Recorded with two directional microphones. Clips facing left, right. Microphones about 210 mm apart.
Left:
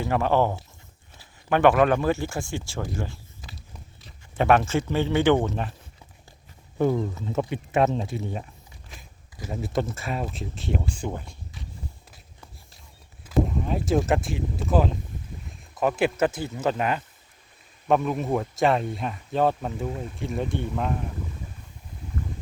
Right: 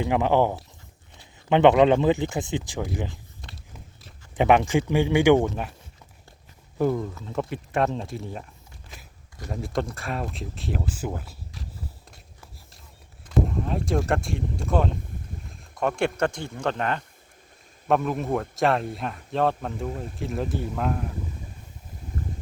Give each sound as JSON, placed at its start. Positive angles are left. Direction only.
{"t": 0.0, "sound": "speech", "side_deg": -15}
{"t": 3.4, "sound": "biting", "side_deg": 5}
{"t": 4.4, "sound": "speech", "side_deg": -15}
{"t": 6.7, "sound": "speech", "side_deg": 0}
{"t": 13.2, "sound": "speech", "side_deg": 0}